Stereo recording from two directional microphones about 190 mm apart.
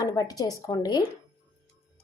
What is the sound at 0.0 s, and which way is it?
A woman's voice, 20° left (ahead or behind).